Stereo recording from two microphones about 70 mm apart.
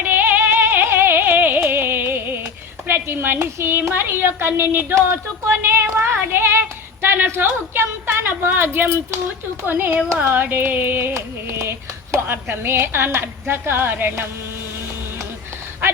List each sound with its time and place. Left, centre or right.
0.1 s music: right
2.8 s a woman's voice: right
9.6 s a sound: right
11.1 s a woman's voice: right